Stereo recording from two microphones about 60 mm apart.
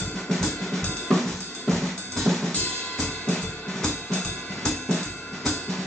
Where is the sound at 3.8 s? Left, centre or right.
Centre.